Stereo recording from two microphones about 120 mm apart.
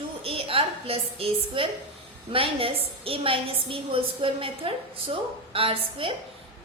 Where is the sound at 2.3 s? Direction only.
50° right (ahead or behind).